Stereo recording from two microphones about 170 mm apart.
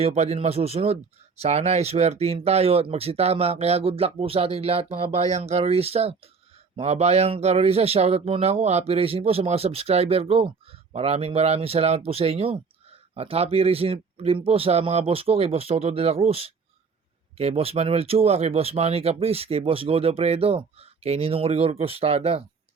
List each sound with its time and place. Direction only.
0.0 s speech: 40° right (ahead or behind)